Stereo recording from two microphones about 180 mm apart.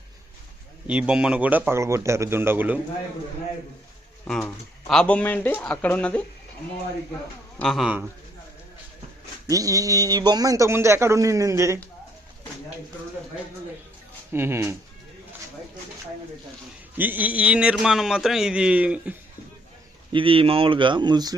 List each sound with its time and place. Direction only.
0.9 s a man's voice: 5° right (ahead or behind)
4.3 s a man's voice: 5° left (ahead or behind)
7.6 s a man's voice: centre (ahead or behind)
9.5 s a man's voice: 20° right (ahead or behind)
14.3 s a man's voice: 15° right (ahead or behind)
17.0 s a man's voice: 10° right (ahead or behind)
20.1 s a man's voice: 30° right (ahead or behind)